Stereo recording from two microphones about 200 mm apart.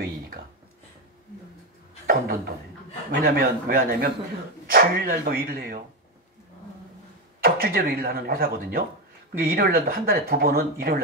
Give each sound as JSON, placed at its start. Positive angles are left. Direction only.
{"t": 2.0, "sound": "a sound", "side_deg": -45}
{"t": 3.2, "sound": "speech", "side_deg": -50}
{"t": 7.4, "sound": "speech", "side_deg": -50}